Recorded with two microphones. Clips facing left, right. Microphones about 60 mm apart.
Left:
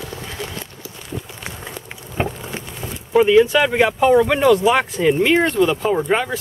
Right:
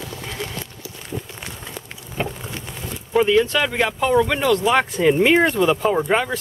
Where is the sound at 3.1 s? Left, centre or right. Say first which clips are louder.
Left 4 dB; centre.